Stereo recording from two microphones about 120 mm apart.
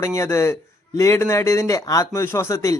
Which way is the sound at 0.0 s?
25° left (ahead or behind).